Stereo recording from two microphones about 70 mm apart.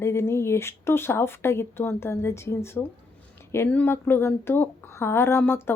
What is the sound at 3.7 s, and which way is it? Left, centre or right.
Speech, left.